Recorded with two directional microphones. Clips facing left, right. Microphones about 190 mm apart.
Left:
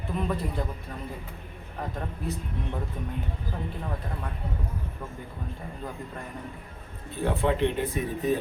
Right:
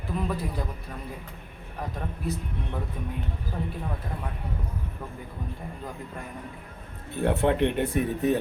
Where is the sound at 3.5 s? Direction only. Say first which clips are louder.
Right 3 dB; centre (ahead or behind).